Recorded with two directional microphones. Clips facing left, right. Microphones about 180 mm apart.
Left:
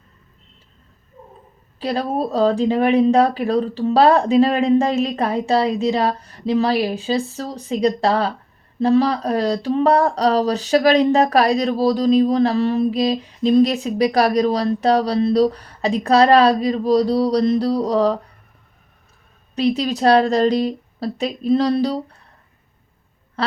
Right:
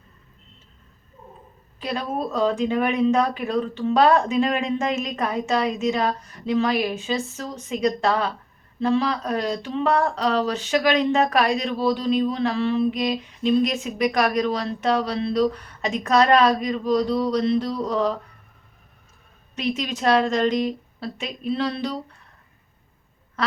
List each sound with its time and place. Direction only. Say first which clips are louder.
1.8 s speech: left 5 dB; 35° left (ahead or behind)
19.5 s speech: left 7 dB; 35° left (ahead or behind)